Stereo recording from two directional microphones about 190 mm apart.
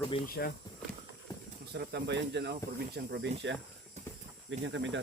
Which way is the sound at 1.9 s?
60° right (ahead or behind).